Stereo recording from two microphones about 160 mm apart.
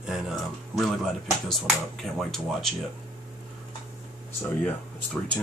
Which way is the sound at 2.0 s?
Centre (ahead or behind).